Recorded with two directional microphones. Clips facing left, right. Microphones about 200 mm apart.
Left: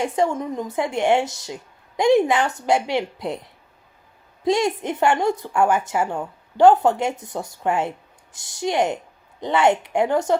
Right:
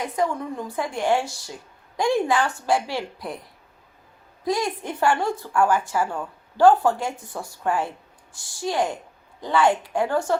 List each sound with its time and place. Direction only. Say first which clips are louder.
0.0 s a woman's voice: left 4 dB; 25° left (ahead or behind)